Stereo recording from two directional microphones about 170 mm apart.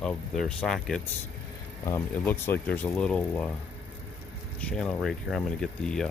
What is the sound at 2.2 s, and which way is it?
Speech, 10° left (ahead or behind).